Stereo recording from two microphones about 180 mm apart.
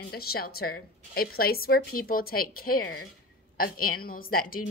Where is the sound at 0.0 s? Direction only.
60° left (ahead or behind).